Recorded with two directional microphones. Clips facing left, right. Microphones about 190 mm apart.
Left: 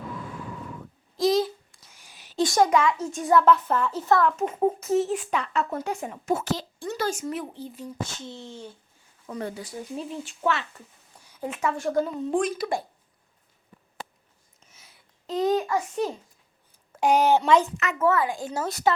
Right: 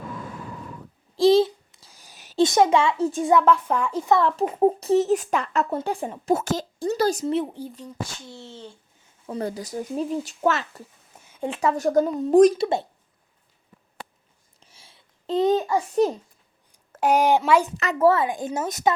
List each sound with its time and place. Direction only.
1.1 s babbling: 30° right (ahead or behind)
1.9 s a sound: 40° right (ahead or behind)
2.4 s a child's voice: 20° right (ahead or behind)
3.2 s a woman's voice: 15° right (ahead or behind)
4.2 s a woman's voice: 35° right (ahead or behind)
5.7 s a woman's voice: 30° right (ahead or behind)
8.0 s speech: 20° left (ahead or behind)
9.2 s a woman's voice: 35° right (ahead or behind)
11.1 s speech: 25° right (ahead or behind); by 12.5 s 40° right (ahead or behind)
12.5 s a child's voice: 25° right (ahead or behind)
14.6 s babbling: 30° right (ahead or behind)
16.9 s a woman's voice: 5° right (ahead or behind)
17.7 s a woman's voice: 35° right (ahead or behind)
18.2 s a child's voice: 20° right (ahead or behind)